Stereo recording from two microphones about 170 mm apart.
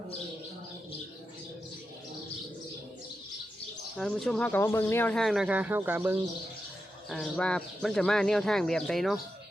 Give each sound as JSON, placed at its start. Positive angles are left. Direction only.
{"t": 3.9, "sound": "speech", "side_deg": 0}
{"t": 7.1, "sound": "speech", "side_deg": 5}